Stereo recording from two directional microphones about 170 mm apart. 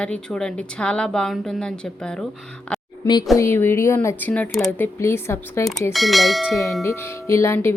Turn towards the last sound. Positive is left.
turn(degrees=15)  # may be behind; listen again after turning